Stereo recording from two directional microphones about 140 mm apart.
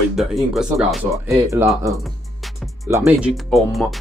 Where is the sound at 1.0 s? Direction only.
20° right (ahead or behind).